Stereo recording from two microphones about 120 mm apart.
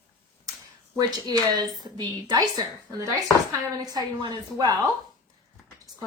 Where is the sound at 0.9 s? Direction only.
30° right (ahead or behind).